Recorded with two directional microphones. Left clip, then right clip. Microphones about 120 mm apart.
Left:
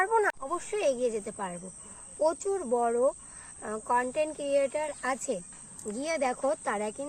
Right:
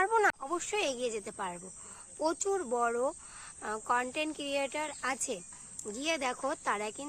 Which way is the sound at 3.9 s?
25° right (ahead or behind).